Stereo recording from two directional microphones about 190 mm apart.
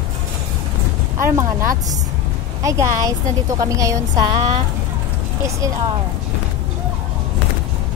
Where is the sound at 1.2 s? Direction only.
15° right (ahead or behind).